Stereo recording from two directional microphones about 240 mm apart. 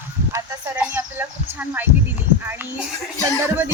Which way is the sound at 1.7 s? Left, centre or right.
Centre.